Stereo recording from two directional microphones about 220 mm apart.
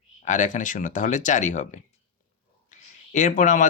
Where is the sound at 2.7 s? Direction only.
35° left (ahead or behind).